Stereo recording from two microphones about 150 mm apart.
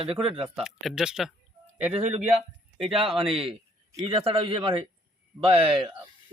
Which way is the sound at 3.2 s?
Centre (ahead or behind).